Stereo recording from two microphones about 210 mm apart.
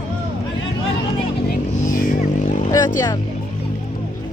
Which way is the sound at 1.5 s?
40° left (ahead or behind).